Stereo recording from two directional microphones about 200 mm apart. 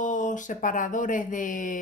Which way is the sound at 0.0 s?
40° left (ahead or behind).